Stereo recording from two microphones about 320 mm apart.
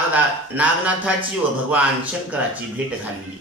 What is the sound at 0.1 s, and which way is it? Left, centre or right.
A man's voice, centre.